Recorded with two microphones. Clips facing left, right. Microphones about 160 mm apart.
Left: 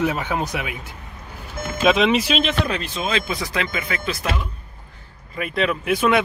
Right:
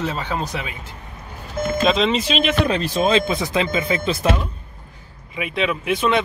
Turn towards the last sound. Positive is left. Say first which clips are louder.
# left 1 dB
turn(degrees=5)  # may be behind; listen again after turning